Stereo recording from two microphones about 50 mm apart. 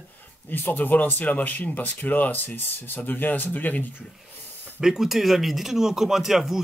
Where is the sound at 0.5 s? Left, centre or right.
Left.